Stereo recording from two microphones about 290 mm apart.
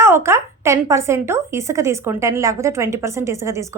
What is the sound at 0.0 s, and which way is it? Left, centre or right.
A woman's voice, centre.